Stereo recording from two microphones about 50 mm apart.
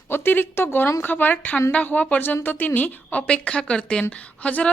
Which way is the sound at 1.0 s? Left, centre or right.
Left.